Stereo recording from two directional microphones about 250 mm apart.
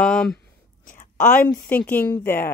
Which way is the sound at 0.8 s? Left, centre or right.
Left.